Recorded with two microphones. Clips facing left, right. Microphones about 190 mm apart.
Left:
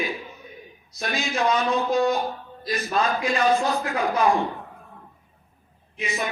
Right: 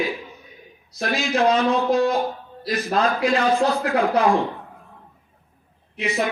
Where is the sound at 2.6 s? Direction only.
90° right.